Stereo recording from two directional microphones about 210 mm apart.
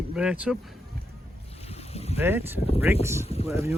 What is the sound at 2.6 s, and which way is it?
Speech, 30° left (ahead or behind).